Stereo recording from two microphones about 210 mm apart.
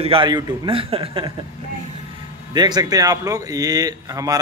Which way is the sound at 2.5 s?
20° right (ahead or behind).